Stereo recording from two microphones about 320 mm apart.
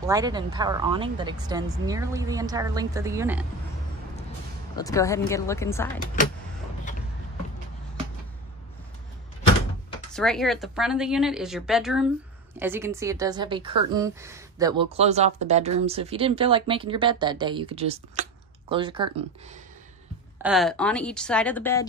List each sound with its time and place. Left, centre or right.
0.0 s speech: centre
4.7 s a woman's voice: centre
10.1 s speech: centre
20.4 s speech: centre